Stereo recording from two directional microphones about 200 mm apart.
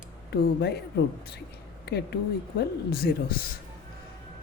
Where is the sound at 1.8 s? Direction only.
55° left (ahead or behind).